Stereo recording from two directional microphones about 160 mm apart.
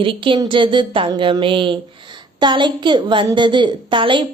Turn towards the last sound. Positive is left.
turn(degrees=-30)  # may be behind; listen again after turning